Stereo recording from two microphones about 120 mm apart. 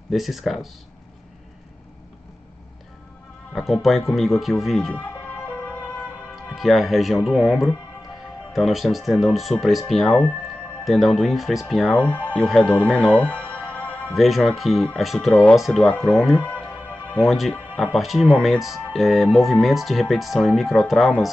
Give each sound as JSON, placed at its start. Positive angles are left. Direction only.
{"t": 0.1, "sound": "speech", "side_deg": 0}
{"t": 3.5, "sound": "speech", "side_deg": 0}
{"t": 5.6, "sound": "music", "side_deg": 10}
{"t": 6.3, "sound": "speech", "side_deg": 0}
{"t": 12.4, "sound": "music", "side_deg": 10}
{"t": 14.1, "sound": "speech", "side_deg": 0}